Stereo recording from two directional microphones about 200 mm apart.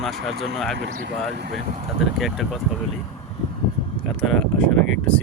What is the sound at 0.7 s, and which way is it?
Speech, 65° right (ahead or behind).